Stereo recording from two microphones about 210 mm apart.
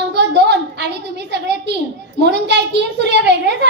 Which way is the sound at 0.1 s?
55° right (ahead or behind).